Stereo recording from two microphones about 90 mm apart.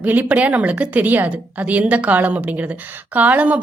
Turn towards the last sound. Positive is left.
turn(degrees=-15)  # may be behind; listen again after turning